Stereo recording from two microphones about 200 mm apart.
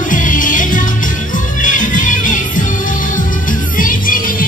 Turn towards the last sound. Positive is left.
turn(degrees=45)  # may be behind; listen again after turning